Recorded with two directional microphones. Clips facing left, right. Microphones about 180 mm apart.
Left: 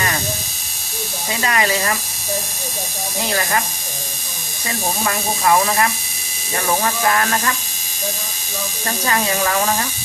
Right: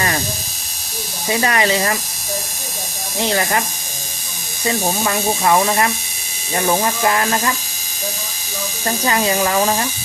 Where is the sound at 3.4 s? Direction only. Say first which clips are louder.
Even; 25° right (ahead or behind).